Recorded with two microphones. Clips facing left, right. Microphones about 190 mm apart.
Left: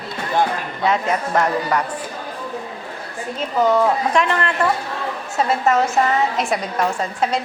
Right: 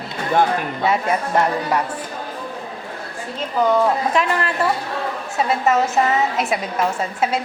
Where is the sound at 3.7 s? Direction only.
Centre (ahead or behind).